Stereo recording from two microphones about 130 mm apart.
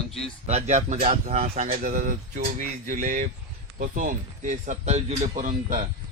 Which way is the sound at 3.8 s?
90° right.